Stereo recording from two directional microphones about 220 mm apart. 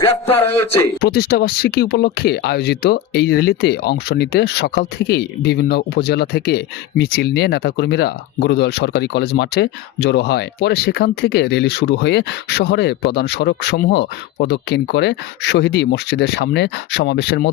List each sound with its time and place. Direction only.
1.0 s speech: 45° left (ahead or behind)